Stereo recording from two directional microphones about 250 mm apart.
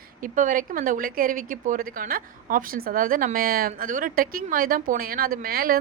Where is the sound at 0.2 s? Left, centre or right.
Right.